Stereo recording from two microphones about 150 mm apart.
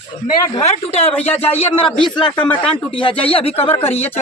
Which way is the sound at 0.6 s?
45° left (ahead or behind).